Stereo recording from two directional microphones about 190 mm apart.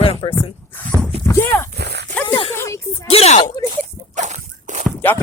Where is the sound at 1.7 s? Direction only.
60° right (ahead or behind).